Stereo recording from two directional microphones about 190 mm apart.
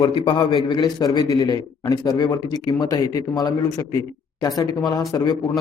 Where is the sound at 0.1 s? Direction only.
25° left (ahead or behind).